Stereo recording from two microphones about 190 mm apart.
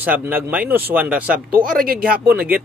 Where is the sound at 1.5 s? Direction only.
50° right (ahead or behind).